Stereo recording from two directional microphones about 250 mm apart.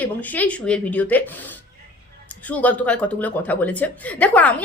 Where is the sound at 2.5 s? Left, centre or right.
Centre.